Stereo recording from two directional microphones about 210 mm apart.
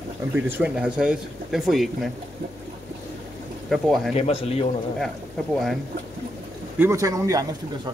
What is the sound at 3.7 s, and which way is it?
Speech, centre (ahead or behind).